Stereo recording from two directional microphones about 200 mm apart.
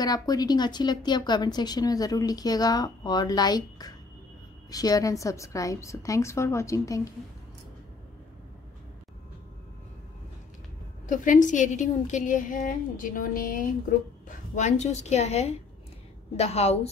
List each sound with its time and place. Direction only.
0.0 s a woman's voice: 20° left (ahead or behind)
11.1 s a woman's voice: 40° left (ahead or behind)